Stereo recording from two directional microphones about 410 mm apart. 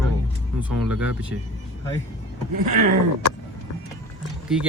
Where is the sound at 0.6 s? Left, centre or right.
Centre.